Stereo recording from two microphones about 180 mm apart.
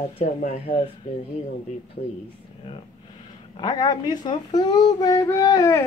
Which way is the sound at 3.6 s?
25° left (ahead or behind).